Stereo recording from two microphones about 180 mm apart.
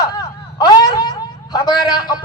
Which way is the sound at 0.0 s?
20° left (ahead or behind).